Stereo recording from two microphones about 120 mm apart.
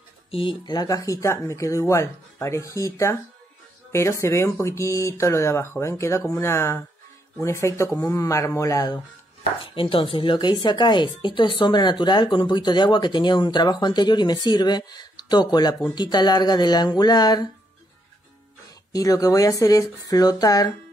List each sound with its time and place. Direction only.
0.3 s speech: 45° left (ahead or behind); by 9.0 s 30° left (ahead or behind)
9.6 s speech: 50° left (ahead or behind)
18.9 s speech: 30° left (ahead or behind)